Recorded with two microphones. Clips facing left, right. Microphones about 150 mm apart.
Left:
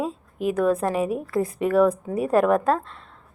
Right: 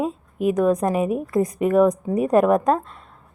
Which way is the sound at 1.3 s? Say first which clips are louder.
Right 3 dB; 20° right (ahead or behind).